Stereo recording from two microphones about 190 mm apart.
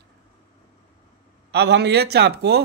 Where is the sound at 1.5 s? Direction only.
60° right (ahead or behind).